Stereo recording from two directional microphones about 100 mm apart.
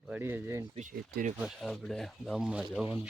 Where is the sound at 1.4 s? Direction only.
Centre (ahead or behind).